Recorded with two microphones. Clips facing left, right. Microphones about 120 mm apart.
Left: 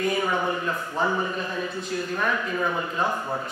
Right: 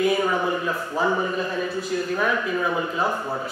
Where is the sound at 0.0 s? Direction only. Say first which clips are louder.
Right 3 dB; 5° right (ahead or behind).